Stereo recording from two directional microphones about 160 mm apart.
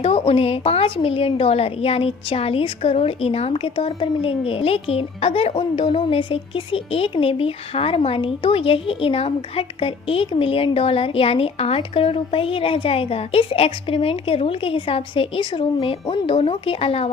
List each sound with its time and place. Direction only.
0.0 s a woman's voice: 40° left (ahead or behind)